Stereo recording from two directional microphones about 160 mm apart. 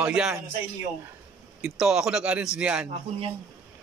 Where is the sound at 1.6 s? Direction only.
5° right (ahead or behind).